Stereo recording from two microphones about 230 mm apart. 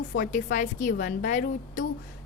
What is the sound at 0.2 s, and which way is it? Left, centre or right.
A woman's voice, left.